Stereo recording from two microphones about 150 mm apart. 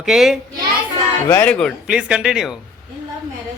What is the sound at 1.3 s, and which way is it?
Speech, 10° left (ahead or behind).